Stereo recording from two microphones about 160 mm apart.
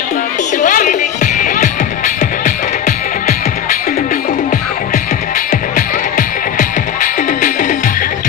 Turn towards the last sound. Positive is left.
turn(degrees=55)  # may be behind; listen again after turning